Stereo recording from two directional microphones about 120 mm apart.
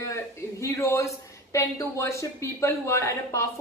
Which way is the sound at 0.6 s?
25° left (ahead or behind).